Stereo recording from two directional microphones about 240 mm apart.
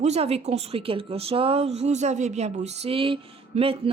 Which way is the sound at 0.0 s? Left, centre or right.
Right.